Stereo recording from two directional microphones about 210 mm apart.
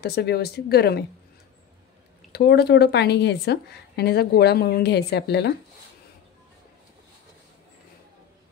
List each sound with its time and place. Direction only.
0.0 s speech: 50° left (ahead or behind)
2.3 s speech: 50° left (ahead or behind)